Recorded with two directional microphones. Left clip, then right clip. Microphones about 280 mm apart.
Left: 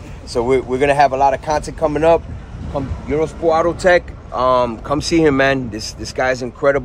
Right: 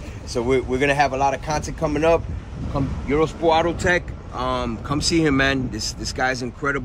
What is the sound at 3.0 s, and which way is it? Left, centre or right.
Speech, centre.